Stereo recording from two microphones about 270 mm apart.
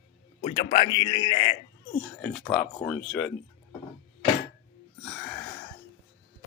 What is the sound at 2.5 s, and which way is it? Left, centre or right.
Speech, centre.